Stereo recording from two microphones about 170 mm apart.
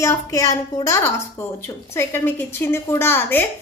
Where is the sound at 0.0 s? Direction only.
20° left (ahead or behind).